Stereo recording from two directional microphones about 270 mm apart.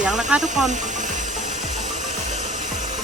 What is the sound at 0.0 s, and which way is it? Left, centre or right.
Speech, centre.